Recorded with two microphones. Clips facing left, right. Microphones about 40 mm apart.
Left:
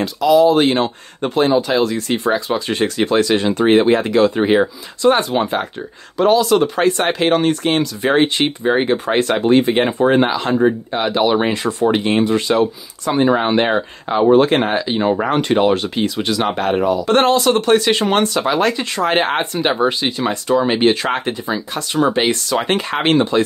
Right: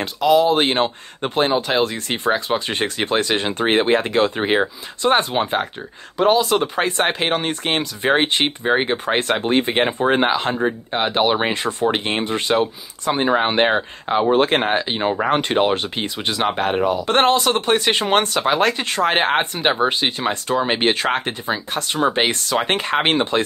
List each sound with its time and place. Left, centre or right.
0.0 s speech: right
7.6 s speech: right